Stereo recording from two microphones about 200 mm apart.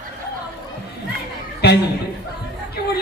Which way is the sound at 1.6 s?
55° left (ahead or behind).